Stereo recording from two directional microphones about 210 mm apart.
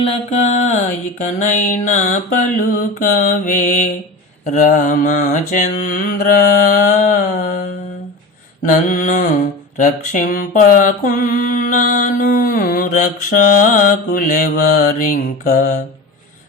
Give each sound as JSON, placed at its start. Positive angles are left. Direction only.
{"t": 0.3, "sound": "mantra", "side_deg": 30}